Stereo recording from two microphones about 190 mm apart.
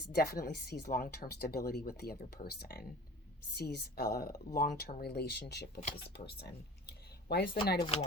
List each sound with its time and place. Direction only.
0.1 s speech: 50° left (ahead or behind)